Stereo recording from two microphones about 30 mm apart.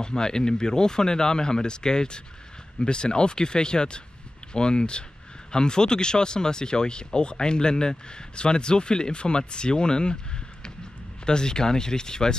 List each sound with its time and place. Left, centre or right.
0.0 s speech: left
11.2 s speech: left